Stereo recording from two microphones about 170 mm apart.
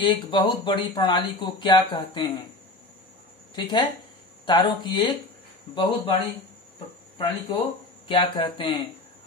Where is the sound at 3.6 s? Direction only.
25° left (ahead or behind).